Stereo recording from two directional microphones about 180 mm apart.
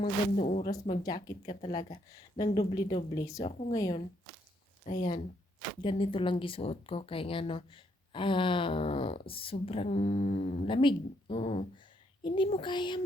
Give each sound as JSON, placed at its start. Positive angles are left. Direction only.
{"t": 0.0, "sound": "speech", "side_deg": 40}
{"t": 1.0, "sound": "speech", "side_deg": 25}
{"t": 1.8, "sound": "speech", "side_deg": 35}
{"t": 2.6, "sound": "speech", "side_deg": 25}
{"t": 5.8, "sound": "speech", "side_deg": 30}